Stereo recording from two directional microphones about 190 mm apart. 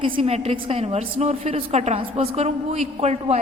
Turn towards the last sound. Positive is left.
turn(degrees=-35)  # may be behind; listen again after turning